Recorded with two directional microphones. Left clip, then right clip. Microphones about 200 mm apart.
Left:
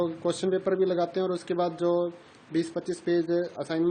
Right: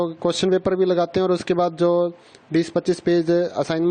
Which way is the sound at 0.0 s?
50° right (ahead or behind).